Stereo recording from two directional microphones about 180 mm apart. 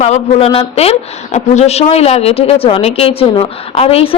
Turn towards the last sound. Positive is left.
turn(degrees=35)  # may be behind; listen again after turning